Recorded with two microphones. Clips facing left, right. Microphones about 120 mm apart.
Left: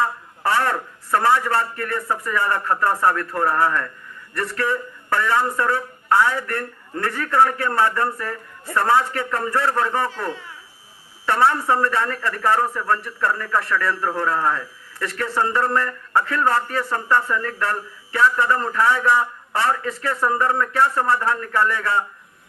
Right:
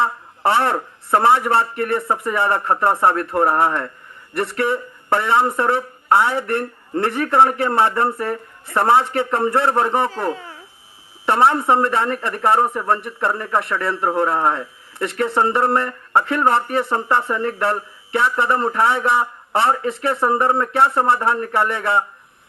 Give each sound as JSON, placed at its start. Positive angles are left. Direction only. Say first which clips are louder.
{"t": 0.0, "sound": "a man's voice", "louder": "right 3 dB", "side_deg": -25}
{"t": 10.2, "sound": "speech", "louder": "right 5 dB", "side_deg": -35}
{"t": 11.3, "sound": "a man's voice", "louder": "right 3 dB", "side_deg": -25}